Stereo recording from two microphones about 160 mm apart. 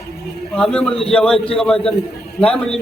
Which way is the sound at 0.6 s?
5° left (ahead or behind).